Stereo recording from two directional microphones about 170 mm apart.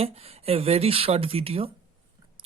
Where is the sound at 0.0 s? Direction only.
35° right (ahead or behind).